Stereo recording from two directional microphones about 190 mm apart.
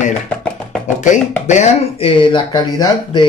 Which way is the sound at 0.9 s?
40° left (ahead or behind).